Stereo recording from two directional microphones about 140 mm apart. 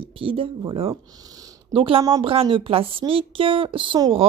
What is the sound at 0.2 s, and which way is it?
Speech, 40° right (ahead or behind).